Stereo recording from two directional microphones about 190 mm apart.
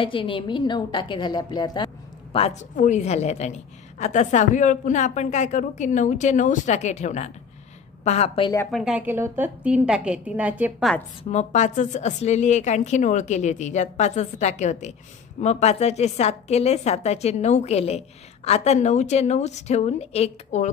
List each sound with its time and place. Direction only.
0.0 s a woman's voice: 25° left (ahead or behind)
2.3 s a woman's voice: 35° left (ahead or behind)
8.7 s a woman's voice: 5° right (ahead or behind)
11.2 s a woman's voice: 40° left (ahead or behind)